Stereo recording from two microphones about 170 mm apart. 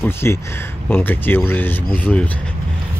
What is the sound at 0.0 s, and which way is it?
Speech, 15° left (ahead or behind).